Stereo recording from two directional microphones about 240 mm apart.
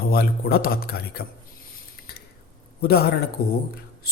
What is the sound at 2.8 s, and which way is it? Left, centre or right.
Speech, left.